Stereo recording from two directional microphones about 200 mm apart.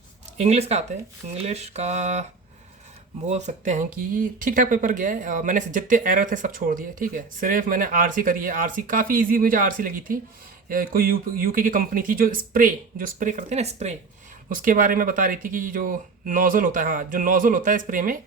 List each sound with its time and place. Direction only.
0.3 s speech: 35° right (ahead or behind)
3.2 s speech: 35° right (ahead or behind)
14.5 s speech: 45° right (ahead or behind)